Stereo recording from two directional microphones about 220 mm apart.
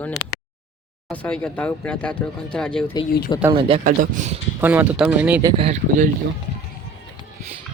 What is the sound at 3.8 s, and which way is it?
Speech, 35° right (ahead or behind).